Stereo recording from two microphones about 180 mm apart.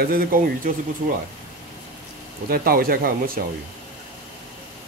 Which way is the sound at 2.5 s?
55° right (ahead or behind).